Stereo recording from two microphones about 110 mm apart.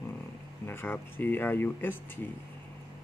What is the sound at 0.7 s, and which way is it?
Speech, 20° left (ahead or behind).